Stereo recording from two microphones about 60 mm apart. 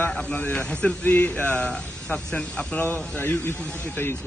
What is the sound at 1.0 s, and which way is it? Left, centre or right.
Speech, left.